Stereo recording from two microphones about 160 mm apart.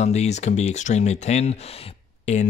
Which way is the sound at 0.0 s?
45° left (ahead or behind).